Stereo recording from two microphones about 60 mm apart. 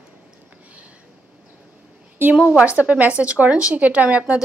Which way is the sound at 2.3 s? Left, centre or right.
Right.